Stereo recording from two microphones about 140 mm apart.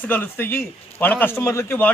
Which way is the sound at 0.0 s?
15° left (ahead or behind).